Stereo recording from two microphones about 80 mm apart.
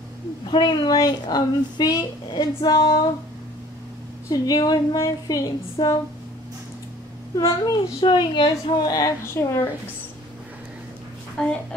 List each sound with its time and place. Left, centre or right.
0.5 s a woman's voice: left
4.3 s speech: left
4.9 s a woman's voice: left
5.4 s speech: left
7.3 s speech: left
8.0 s a woman's voice: left
8.5 s a woman's voice: left
9.2 s a woman's voice: left
11.4 s speech: centre